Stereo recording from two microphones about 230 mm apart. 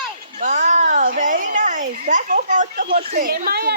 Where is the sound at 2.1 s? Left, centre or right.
Right.